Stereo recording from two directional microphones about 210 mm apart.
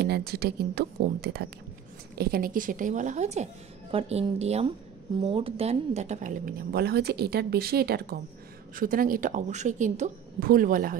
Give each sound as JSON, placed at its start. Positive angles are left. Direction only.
{"t": 0.0, "sound": "a woman's voice", "side_deg": -50}